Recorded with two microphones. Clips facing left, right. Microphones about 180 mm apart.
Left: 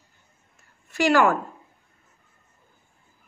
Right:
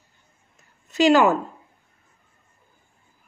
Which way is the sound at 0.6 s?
20° right (ahead or behind).